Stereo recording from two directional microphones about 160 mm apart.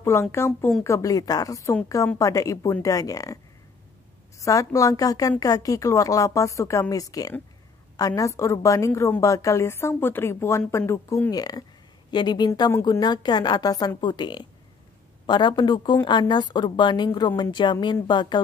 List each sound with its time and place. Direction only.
0.0 s a woman's voice: 15° left (ahead or behind)
0.5 s speech: 5° left (ahead or behind)
0.8 s a woman's voice: 20° left (ahead or behind)
4.4 s a woman's voice: 20° left (ahead or behind)